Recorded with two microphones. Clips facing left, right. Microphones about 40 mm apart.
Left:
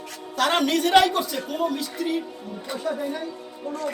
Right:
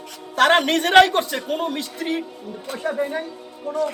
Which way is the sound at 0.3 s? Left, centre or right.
Right.